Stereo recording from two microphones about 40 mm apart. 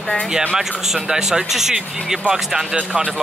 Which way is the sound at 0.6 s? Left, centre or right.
Centre.